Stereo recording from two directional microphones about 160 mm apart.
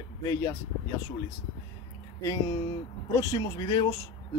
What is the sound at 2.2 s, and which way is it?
A man's voice, 20° left (ahead or behind).